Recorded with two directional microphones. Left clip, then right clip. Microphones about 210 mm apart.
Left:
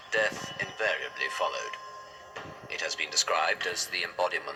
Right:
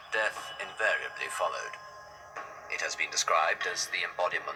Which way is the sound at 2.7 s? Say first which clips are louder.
Left 2 dB; 30° left (ahead or behind).